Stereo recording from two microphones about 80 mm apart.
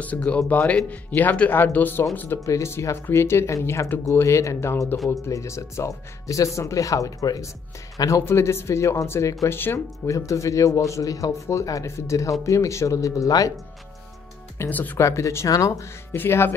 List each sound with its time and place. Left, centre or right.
0.0 s speech: centre
2.4 s speech: left
8.3 s speech: left
10.1 s speech: left
14.7 s speech: left
15.0 s speech: left